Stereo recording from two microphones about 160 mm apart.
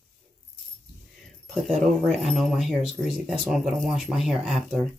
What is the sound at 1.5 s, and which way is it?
Speech, centre (ahead or behind).